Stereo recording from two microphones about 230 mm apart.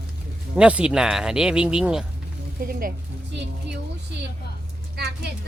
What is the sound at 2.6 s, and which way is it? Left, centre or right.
Speech, right.